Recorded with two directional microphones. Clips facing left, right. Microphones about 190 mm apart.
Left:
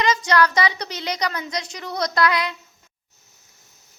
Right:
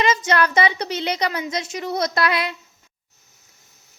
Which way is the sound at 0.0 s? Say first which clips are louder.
Even; 25° right (ahead or behind).